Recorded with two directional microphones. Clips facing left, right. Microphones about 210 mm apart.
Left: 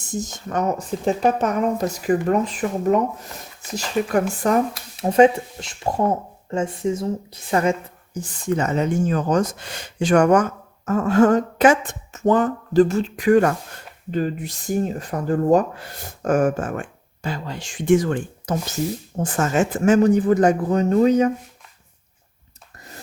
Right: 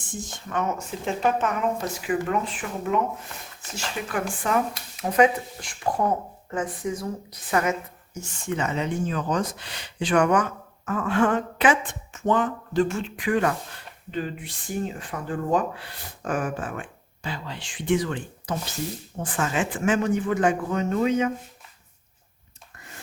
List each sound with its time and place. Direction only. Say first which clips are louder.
0.1 s speech: left 6 dB; 40° left (ahead or behind)
4.1 s speech: left 5 dB; 40° left (ahead or behind)
4.9 s speech: left 6 dB; 30° left (ahead or behind)